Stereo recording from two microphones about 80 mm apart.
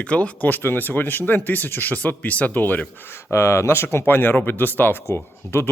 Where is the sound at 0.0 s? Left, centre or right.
Centre.